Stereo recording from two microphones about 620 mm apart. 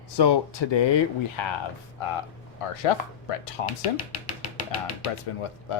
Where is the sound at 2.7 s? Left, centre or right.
Left.